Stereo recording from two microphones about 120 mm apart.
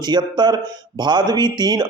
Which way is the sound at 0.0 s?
40° right (ahead or behind).